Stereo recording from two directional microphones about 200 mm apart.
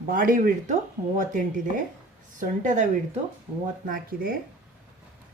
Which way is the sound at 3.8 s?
45° right (ahead or behind).